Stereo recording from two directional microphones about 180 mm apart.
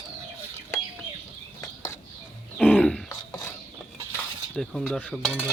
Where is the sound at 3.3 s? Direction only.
20° left (ahead or behind).